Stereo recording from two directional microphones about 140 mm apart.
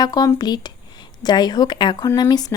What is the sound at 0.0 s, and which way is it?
A woman's voice, 25° left (ahead or behind).